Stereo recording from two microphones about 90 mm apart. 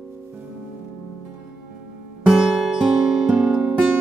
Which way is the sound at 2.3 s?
5° right (ahead or behind).